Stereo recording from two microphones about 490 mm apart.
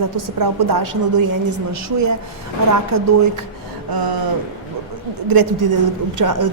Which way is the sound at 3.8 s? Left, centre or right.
Right.